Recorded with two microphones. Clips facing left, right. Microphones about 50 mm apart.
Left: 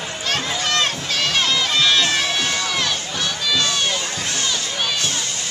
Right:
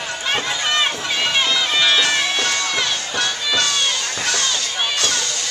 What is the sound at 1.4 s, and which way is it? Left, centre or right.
Crowd, centre.